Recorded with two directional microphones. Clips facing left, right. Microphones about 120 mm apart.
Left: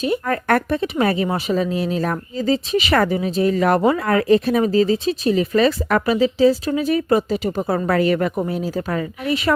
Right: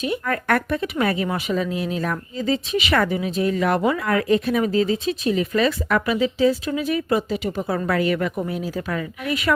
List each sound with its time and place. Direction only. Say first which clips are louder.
0.0 s speech: left 3 dB; 35° left (ahead or behind)